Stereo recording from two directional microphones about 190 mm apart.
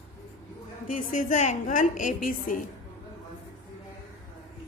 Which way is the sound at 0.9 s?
40° left (ahead or behind).